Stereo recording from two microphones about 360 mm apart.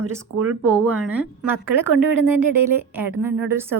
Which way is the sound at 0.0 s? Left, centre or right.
Right.